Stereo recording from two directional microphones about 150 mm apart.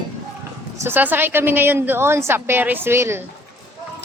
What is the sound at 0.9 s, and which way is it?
A woman's voice, 15° right (ahead or behind).